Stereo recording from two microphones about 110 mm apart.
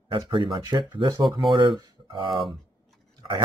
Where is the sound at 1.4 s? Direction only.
50° right (ahead or behind).